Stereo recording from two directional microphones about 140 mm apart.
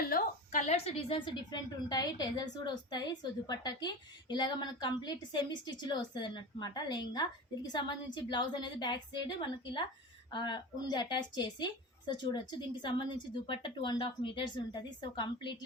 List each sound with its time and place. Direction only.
0.0 s a woman's voice: 85° left; by 9.3 s 35° left (ahead or behind)
10.3 s a woman's voice: 35° left (ahead or behind)